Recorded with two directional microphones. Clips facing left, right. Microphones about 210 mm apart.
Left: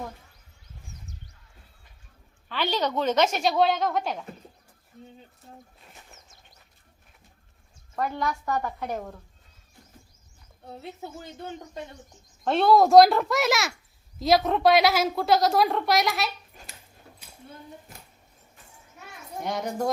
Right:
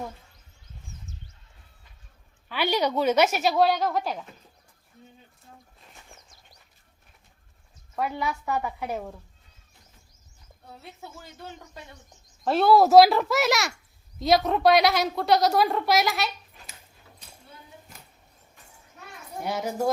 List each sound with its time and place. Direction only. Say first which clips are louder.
2.5 s a woman's voice: right 2 dB; 10° right (ahead or behind)
6.1 s bird flight: even; 25° left (ahead or behind)
7.9 s a woman's voice: even; 5° right (ahead or behind)
12.5 s a woman's voice: even; 5° right (ahead or behind)
19.4 s a woman's voice: right 1 dB; 5° right (ahead or behind)